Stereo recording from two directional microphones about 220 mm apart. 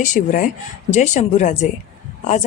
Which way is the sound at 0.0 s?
35° left (ahead or behind).